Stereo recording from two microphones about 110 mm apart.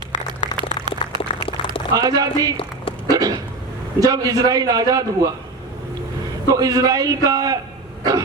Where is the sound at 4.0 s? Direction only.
35° right (ahead or behind).